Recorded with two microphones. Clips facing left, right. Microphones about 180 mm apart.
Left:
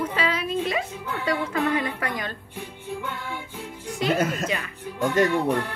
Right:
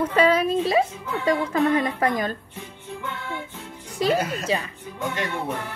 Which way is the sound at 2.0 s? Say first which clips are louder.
Right 7 dB; 40° right (ahead or behind).